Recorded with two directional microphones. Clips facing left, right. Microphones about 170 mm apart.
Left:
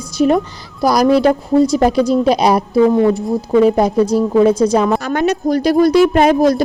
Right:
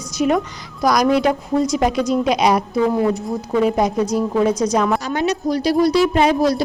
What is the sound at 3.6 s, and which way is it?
A woman's voice, 30° left (ahead or behind).